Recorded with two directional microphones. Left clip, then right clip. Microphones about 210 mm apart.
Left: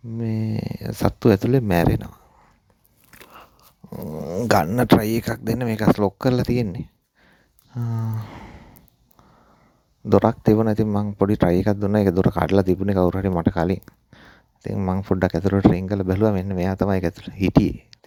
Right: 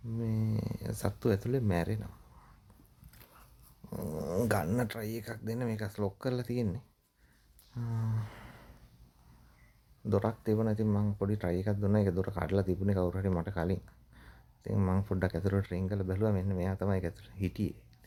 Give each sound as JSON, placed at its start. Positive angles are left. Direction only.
{"t": 0.2, "sound": "a sound", "side_deg": 40}
{"t": 3.8, "sound": "dog", "side_deg": 25}
{"t": 4.4, "sound": "speech", "side_deg": 40}
{"t": 7.7, "sound": "speech", "side_deg": 40}
{"t": 8.2, "sound": "a sound", "side_deg": 25}
{"t": 10.1, "sound": "speech", "side_deg": 40}
{"t": 14.8, "sound": "speech", "side_deg": 25}
{"t": 15.0, "sound": "speech", "side_deg": 40}